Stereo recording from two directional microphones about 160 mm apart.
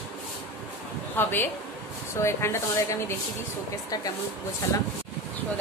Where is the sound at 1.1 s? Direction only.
15° left (ahead or behind).